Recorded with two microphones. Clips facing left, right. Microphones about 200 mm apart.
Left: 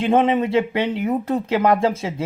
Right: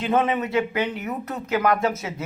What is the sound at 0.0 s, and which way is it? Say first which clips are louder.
Speech: left 5 dB; 30° left (ahead or behind).